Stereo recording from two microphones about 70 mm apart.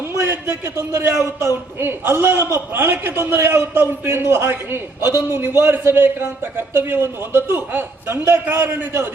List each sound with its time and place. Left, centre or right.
0.1 s a man's voice: right